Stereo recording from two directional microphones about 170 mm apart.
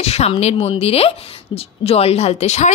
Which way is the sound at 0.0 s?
35° left (ahead or behind).